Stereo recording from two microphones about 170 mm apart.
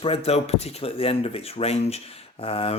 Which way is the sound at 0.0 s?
35° left (ahead or behind).